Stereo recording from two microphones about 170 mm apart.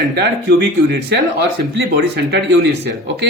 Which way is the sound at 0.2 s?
75° right (ahead or behind).